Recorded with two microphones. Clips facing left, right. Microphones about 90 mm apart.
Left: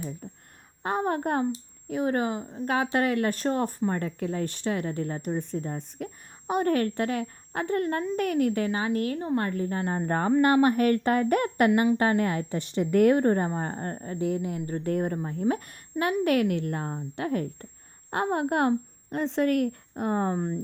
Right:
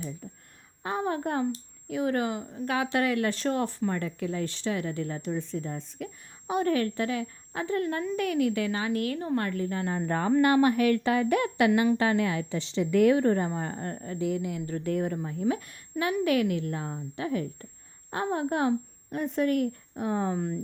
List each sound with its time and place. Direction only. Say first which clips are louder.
0.8 s a woman's voice: left 3 dB; 50° left (ahead or behind); by 2.6 s 30° left (ahead or behind)
2.6 s a woman's voice: left 2 dB; 40° left (ahead or behind)
18.1 s a woman's voice: left 2 dB; 60° left (ahead or behind)
20.0 s a woman's voice: left 2 dB; 50° left (ahead or behind)